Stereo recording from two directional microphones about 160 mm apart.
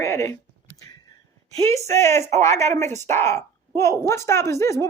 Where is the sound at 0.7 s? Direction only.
20° left (ahead or behind).